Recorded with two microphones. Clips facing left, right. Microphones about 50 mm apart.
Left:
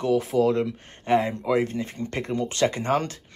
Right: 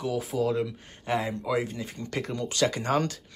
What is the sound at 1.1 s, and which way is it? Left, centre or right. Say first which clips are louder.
Speech: left 6 dB; left.